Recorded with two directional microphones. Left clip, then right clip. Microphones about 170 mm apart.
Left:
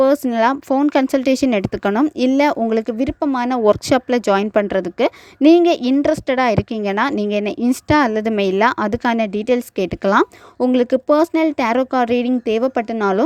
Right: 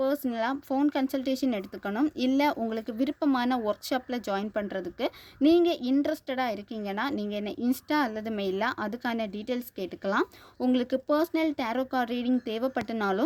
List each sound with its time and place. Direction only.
0.0 s speech: 50° left (ahead or behind)